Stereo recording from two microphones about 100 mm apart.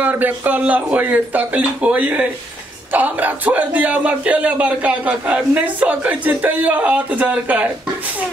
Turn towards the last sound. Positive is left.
turn(degrees=-15)  # may be behind; listen again after turning